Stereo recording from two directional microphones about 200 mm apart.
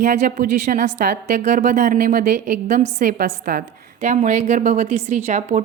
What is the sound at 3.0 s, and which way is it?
A woman's voice, 50° right (ahead or behind).